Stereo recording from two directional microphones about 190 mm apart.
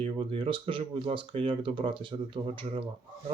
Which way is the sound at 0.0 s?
30° right (ahead or behind).